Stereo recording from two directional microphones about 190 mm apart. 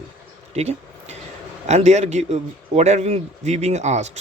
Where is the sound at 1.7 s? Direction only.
35° right (ahead or behind).